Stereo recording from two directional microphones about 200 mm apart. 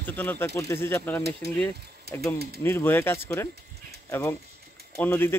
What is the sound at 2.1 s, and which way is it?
Speech, 50° right (ahead or behind).